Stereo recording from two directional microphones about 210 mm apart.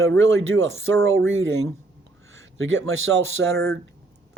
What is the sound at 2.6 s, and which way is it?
Speech, 70° right (ahead or behind).